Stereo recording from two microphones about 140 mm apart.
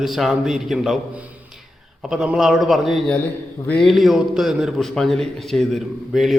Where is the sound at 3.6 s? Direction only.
10° left (ahead or behind).